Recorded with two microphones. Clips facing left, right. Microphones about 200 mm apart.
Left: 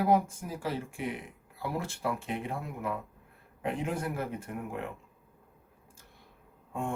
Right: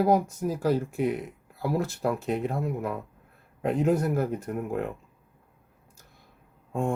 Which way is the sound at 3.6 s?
40° right (ahead or behind).